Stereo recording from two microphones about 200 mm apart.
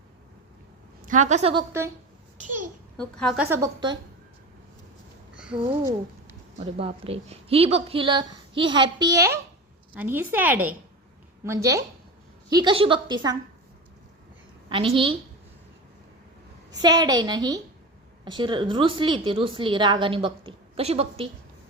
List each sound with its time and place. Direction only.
1.0 s a woman's voice: 40° right (ahead or behind)
3.0 s a woman's voice: 5° left (ahead or behind)
3.5 s a woman's voice: 20° right (ahead or behind)
6.6 s a woman's voice: 30° right (ahead or behind)
14.7 s a woman's voice: 25° right (ahead or behind)
16.8 s a woman's voice: 20° right (ahead or behind)